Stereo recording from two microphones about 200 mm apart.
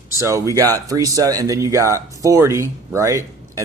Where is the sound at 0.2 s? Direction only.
15° right (ahead or behind).